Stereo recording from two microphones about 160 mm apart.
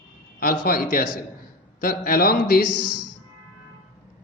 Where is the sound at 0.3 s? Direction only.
65° left (ahead or behind).